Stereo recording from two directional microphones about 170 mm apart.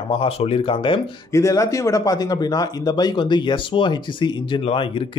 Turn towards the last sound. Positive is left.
turn(degrees=30)  # may be behind; listen again after turning